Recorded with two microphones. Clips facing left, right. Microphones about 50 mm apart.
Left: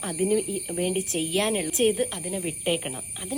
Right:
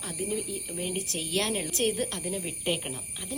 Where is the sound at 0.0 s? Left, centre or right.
Left.